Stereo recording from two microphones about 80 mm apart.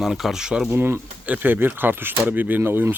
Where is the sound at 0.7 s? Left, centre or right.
Right.